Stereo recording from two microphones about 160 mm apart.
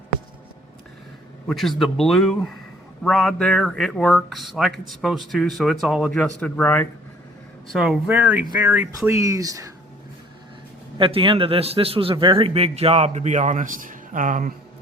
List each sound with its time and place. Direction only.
1.5 s speech: centre (ahead or behind)
7.7 s speech: 5° right (ahead or behind); by 9.6 s 20° right (ahead or behind)
10.9 s a man's voice: 35° right (ahead or behind); by 14.5 s 55° right (ahead or behind)